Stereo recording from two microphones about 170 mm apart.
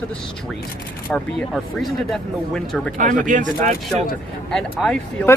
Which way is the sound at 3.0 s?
50° right (ahead or behind).